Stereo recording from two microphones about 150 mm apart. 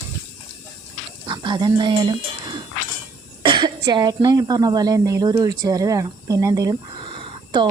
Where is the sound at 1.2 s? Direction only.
30° right (ahead or behind).